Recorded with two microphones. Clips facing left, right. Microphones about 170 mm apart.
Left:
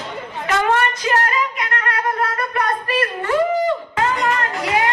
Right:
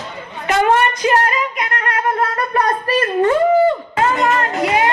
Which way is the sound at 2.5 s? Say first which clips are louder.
Right 4 dB; 35° right (ahead or behind).